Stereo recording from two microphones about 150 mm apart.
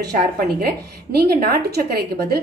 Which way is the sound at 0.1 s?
90° right.